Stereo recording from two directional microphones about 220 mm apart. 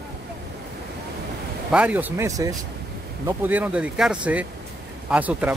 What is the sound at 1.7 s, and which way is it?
Speech, 5° right (ahead or behind).